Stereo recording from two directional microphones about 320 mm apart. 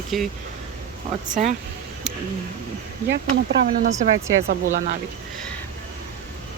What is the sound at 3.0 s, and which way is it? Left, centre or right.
Speech, right.